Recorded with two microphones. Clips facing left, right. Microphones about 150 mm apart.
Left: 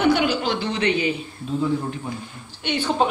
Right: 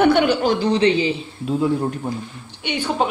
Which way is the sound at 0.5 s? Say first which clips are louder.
Right 6 dB; 35° right (ahead or behind).